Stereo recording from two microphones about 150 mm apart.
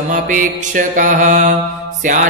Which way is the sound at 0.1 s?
60° right (ahead or behind).